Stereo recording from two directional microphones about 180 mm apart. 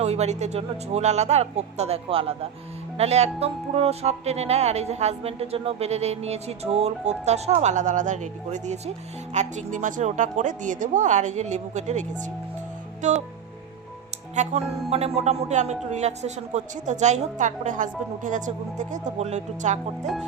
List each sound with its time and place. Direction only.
0.0 s a man's voice: 35° right (ahead or behind)
13.0 s music: 40° right (ahead or behind)
14.4 s a man's voice: 40° right (ahead or behind)